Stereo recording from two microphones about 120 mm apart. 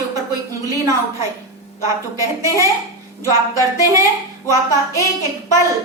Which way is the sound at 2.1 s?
25° right (ahead or behind).